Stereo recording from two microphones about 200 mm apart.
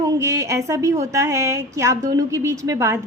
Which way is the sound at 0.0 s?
15° right (ahead or behind).